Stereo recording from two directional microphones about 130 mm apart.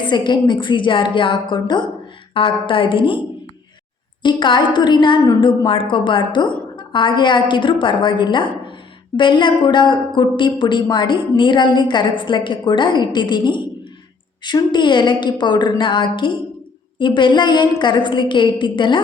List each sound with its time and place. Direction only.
0.1 s a woman's voice: 35° left (ahead or behind)
4.2 s a woman's voice: 35° left (ahead or behind)